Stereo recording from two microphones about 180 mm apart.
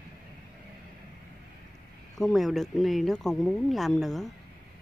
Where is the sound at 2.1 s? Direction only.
Centre (ahead or behind).